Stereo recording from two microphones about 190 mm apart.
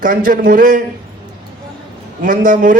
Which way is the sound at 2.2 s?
45° right (ahead or behind).